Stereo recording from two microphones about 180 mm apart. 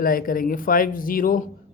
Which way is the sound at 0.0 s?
50° left (ahead or behind).